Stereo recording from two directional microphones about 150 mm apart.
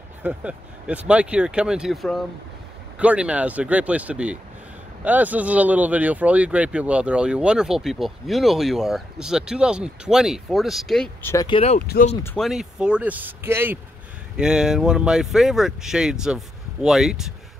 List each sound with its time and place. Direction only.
0.2 s speech: 10° right (ahead or behind)
11.4 s speech: 40° left (ahead or behind)
12.4 s speech: centre (ahead or behind)
14.3 s speech: 5° right (ahead or behind)